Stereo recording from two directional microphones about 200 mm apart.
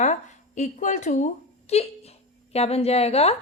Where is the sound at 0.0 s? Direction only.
35° left (ahead or behind).